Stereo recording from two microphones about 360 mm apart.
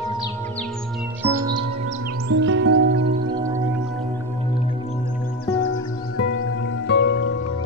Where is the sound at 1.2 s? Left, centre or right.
Centre.